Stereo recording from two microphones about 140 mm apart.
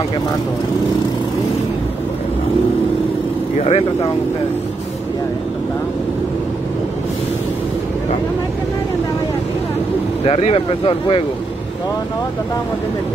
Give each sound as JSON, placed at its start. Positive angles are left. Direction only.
{"t": 3.5, "sound": "speech", "side_deg": 45}
{"t": 10.2, "sound": "speech", "side_deg": 40}